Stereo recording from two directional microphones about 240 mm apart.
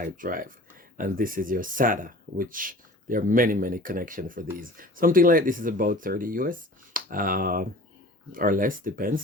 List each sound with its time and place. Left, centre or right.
0.0 s speech: right